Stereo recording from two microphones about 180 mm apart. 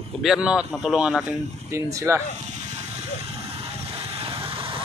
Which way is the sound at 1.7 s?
15° right (ahead or behind).